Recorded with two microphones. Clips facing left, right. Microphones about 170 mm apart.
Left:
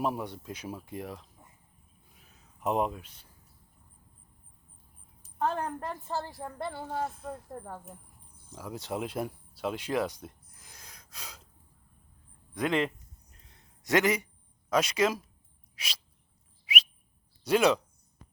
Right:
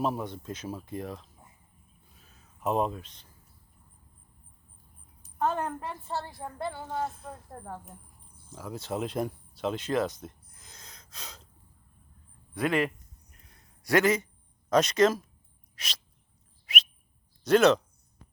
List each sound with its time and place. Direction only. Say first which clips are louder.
0.0 s speech: right 1 dB; 15° left (ahead or behind)
2.1 s a sound: even; 15° left (ahead or behind)
5.5 s a woman's voice: right 1 dB; 5° right (ahead or behind)
6.8 s speech: right 1 dB; 10° left (ahead or behind)
8.4 s speech: right 1 dB; 15° left (ahead or behind)
12.5 s a woman's voice: right 1 dB; 5° right (ahead or behind)
13.3 s a sound: right 1 dB; 25° left (ahead or behind)
14.7 s speech: right 4 dB; 10° left (ahead or behind)
15.7 s a sound: even; 10° left (ahead or behind)
16.6 s whistle: left 1 dB; 10° left (ahead or behind)
17.4 s speech: right 4 dB; 10° left (ahead or behind)